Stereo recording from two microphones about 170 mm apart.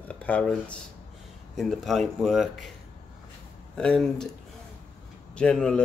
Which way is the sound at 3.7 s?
5° left (ahead or behind).